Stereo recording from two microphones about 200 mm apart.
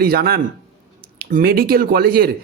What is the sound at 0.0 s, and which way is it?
Speech, 50° right (ahead or behind).